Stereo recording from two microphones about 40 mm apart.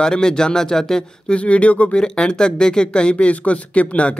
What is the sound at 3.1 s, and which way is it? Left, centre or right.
Speech, left.